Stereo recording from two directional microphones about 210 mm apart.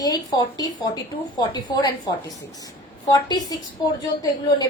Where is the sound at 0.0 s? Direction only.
20° left (ahead or behind).